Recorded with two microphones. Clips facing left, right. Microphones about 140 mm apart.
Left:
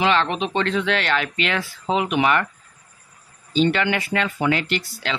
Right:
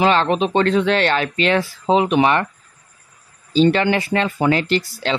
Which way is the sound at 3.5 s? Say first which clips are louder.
Right 5 dB; 35° right (ahead or behind).